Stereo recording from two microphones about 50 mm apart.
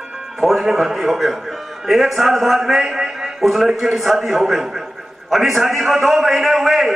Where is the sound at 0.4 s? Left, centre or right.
Centre.